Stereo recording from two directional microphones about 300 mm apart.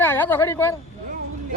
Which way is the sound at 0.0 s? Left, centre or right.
Centre.